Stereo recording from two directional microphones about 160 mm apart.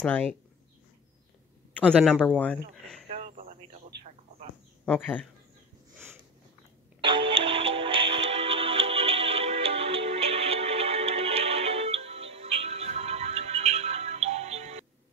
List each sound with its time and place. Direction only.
0.0 s a man's voice: 10° left (ahead or behind)
1.8 s a man's voice: 5° left (ahead or behind)
3.1 s radio: 40° right (ahead or behind)
4.8 s a man's voice: 10° left (ahead or behind)
7.0 s music: 35° right (ahead or behind)